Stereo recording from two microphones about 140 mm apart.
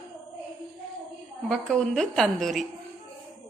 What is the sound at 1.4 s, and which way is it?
A woman's voice, 5° left (ahead or behind).